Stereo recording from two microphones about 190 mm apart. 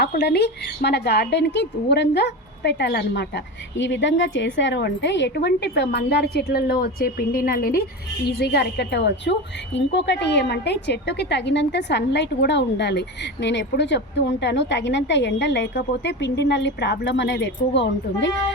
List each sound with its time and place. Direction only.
0.0 s a woman's voice: 60° left (ahead or behind)